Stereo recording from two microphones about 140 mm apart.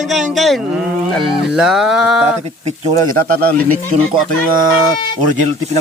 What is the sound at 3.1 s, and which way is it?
Speech, 90° right.